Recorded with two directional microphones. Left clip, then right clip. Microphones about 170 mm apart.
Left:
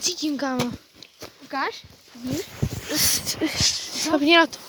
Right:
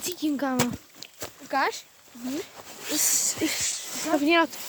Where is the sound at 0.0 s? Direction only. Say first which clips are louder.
Left 3 dB; 20° right (ahead or behind).